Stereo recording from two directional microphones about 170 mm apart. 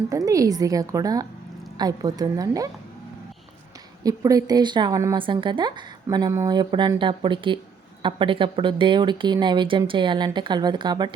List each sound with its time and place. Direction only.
0.1 s a woman's voice: 20° right (ahead or behind)
4.0 s a woman's voice: 20° right (ahead or behind)